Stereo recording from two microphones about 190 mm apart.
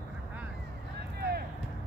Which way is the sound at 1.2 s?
55° right (ahead or behind).